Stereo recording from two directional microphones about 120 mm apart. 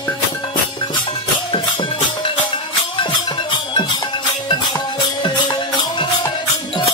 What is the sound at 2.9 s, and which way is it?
Music, 40° left (ahead or behind).